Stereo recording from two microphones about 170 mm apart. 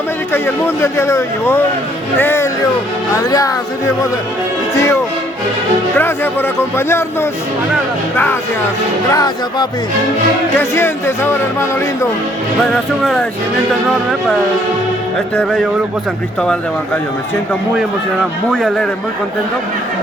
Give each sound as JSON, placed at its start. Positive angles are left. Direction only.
{"t": 0.3, "sound": "speech", "side_deg": 15}
{"t": 6.0, "sound": "speech", "side_deg": 10}
{"t": 9.0, "sound": "speech", "side_deg": 20}
{"t": 12.7, "sound": "speech", "side_deg": 0}
{"t": 15.4, "sound": "speech", "side_deg": 0}
{"t": 18.5, "sound": "speech", "side_deg": 0}